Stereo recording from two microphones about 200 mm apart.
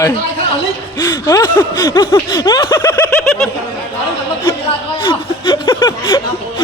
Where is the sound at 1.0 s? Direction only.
15° left (ahead or behind).